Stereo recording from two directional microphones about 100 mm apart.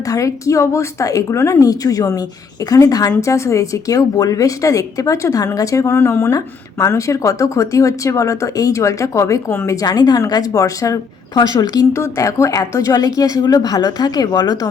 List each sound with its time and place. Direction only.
0.1 s speech: 35° left (ahead or behind)